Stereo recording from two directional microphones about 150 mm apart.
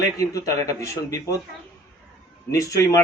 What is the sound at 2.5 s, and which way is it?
Speech, 25° left (ahead or behind).